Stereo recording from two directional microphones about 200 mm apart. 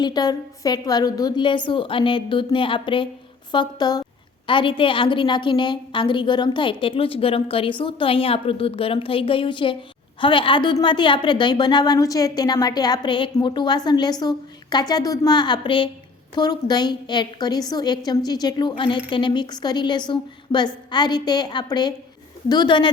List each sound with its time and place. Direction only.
0.0 s a woman's voice: 20° left (ahead or behind)